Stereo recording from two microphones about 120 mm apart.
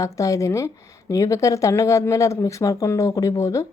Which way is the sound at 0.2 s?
25° left (ahead or behind).